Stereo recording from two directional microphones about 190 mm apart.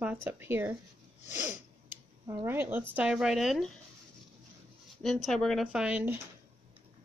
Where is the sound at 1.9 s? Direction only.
10° right (ahead or behind).